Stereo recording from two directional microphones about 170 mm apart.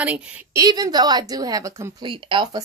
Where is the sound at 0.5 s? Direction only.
20° right (ahead or behind).